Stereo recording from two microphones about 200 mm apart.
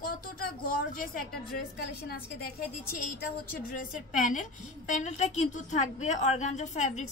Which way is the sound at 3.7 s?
40° left (ahead or behind).